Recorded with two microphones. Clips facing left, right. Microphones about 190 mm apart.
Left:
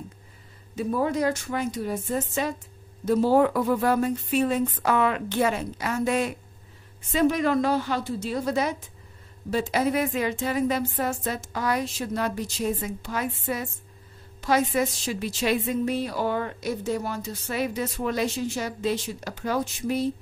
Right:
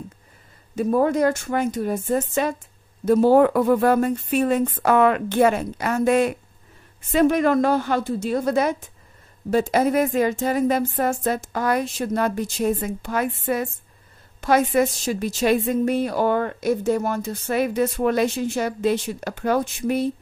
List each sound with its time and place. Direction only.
0.7 s a woman's voice: 50° right (ahead or behind)